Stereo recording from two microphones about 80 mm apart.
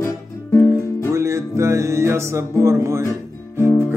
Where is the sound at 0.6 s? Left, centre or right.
Right.